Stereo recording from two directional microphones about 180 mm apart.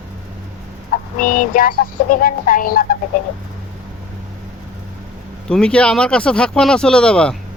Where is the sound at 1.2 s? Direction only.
50° left (ahead or behind).